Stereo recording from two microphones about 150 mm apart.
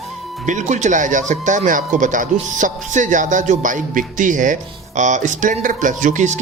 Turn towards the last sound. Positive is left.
turn(degrees=-55)  # may be behind; listen again after turning